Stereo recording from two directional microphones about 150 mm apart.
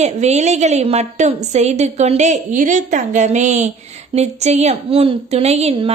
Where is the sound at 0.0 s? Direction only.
50° right (ahead or behind).